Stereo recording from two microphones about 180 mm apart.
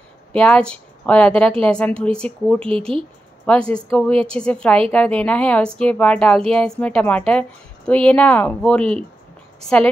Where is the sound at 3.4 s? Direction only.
5° left (ahead or behind).